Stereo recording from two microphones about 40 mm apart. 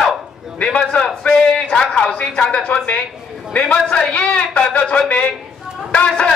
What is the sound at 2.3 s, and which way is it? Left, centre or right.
A man's voice, left.